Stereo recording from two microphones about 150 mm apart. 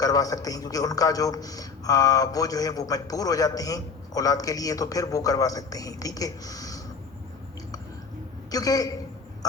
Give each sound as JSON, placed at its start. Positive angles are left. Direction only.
{"t": 0.0, "sound": "a man's voice", "side_deg": 25}
{"t": 8.4, "sound": "a man's voice", "side_deg": 25}